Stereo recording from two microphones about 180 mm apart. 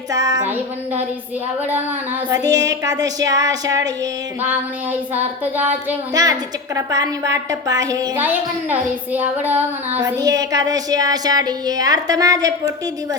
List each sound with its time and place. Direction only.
0.1 s a woman's voice: 20° right (ahead or behind)
2.3 s a woman's voice: 20° right (ahead or behind)
6.2 s a woman's voice: 20° right (ahead or behind)
10.2 s a woman's voice: 20° right (ahead or behind)